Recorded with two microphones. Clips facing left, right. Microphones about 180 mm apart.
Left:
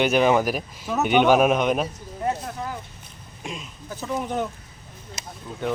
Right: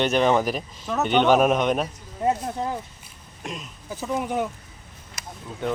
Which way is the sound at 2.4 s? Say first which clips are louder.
Right 4 dB; 25° right (ahead or behind).